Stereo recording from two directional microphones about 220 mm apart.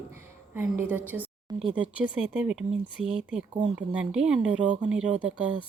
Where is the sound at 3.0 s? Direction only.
30° right (ahead or behind).